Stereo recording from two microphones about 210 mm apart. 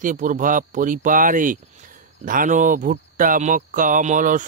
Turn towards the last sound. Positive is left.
turn(degrees=-40)  # may be behind; listen again after turning